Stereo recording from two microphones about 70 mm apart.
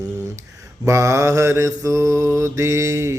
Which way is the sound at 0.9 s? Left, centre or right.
Right.